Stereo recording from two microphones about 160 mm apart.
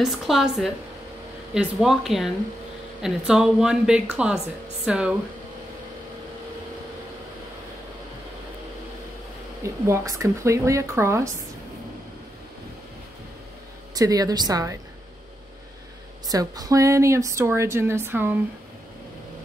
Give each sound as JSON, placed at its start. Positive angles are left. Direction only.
{"t": 0.0, "sound": "a woman's voice", "side_deg": 0}
{"t": 9.6, "sound": "speech", "side_deg": -20}
{"t": 13.9, "sound": "a woman's voice", "side_deg": -25}
{"t": 16.3, "sound": "speech", "side_deg": -20}